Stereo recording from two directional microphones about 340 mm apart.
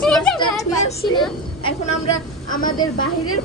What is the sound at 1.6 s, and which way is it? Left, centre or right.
Speech, centre.